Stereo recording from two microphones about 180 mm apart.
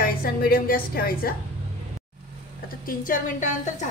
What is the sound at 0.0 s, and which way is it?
A woman's voice, 55° left (ahead or behind).